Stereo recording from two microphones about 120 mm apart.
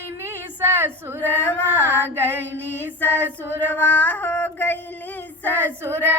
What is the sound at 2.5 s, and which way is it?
Female singing, 15° left (ahead or behind).